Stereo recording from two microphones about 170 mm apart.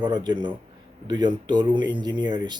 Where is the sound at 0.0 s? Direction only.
25° right (ahead or behind).